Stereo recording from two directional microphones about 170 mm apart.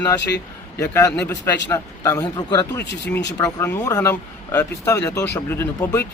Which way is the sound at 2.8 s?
90° left.